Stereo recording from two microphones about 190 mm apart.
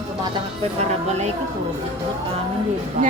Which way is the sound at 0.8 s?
35° right (ahead or behind).